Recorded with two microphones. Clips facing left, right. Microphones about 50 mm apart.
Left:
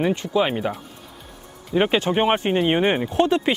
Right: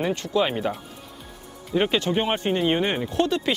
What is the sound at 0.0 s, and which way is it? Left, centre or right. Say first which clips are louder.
Speech: left 3 dB; centre.